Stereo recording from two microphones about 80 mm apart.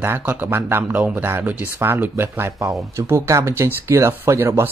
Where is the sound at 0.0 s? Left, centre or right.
Right.